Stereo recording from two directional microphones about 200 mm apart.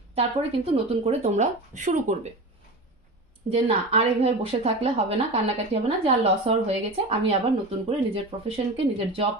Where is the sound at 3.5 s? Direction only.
30° right (ahead or behind).